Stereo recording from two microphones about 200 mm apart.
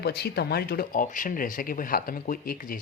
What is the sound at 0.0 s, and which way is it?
Speech, 55° left (ahead or behind).